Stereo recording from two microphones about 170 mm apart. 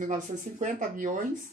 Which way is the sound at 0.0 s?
50° right (ahead or behind).